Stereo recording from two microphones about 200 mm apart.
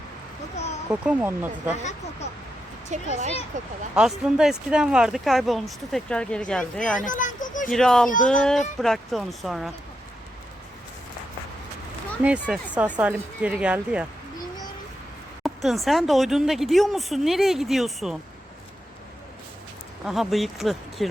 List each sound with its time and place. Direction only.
0.9 s speech: 5° right (ahead or behind)
1.8 s speech: 35° left (ahead or behind)
2.9 s speech: 35° right (ahead or behind)
3.9 s speech: 5° right (ahead or behind)
7.0 s a sound: 40° left (ahead or behind)
7.7 s speech: centre (ahead or behind)
12.2 s speech: 5° right (ahead or behind)
15.4 s speech: centre (ahead or behind)
20.1 s speech: centre (ahead or behind)